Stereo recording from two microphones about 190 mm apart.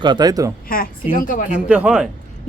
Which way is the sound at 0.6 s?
50° left (ahead or behind).